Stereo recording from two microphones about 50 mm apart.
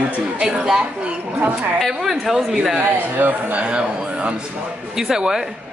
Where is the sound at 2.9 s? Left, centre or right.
Right.